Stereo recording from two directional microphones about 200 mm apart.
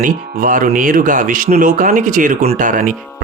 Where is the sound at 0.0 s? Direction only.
40° right (ahead or behind).